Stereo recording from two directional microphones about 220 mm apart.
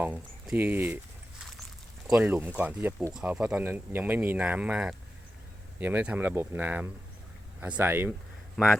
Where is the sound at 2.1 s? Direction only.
5° right (ahead or behind).